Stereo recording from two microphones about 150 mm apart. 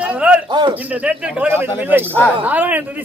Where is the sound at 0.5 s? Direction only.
30° right (ahead or behind).